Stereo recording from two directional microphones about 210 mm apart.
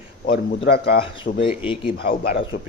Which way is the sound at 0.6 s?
50° left (ahead or behind).